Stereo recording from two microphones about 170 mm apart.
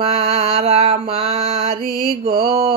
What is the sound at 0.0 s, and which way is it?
Mantra, 35° right (ahead or behind).